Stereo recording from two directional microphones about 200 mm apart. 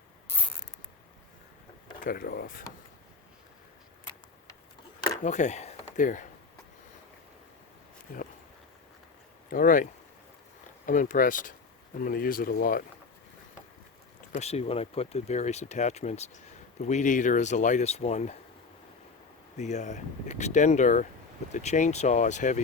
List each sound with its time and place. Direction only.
2.0 s speech: 45° left (ahead or behind)
4.9 s a sound: 15° left (ahead or behind)
5.2 s speech: 35° left (ahead or behind)
9.5 s speech: 45° left (ahead or behind)
14.3 s speech: 30° left (ahead or behind)
19.5 s speech: 35° left (ahead or behind)